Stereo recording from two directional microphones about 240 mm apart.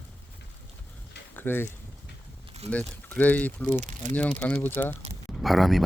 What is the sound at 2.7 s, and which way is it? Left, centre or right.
Speech, centre.